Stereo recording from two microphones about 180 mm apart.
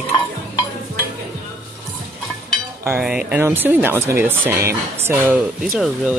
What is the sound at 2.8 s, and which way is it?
Speech, 10° right (ahead or behind).